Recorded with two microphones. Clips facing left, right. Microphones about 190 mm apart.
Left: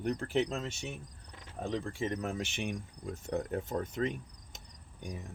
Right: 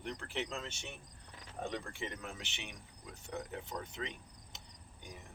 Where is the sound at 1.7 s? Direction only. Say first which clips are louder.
Left 8 dB; 35° left (ahead or behind).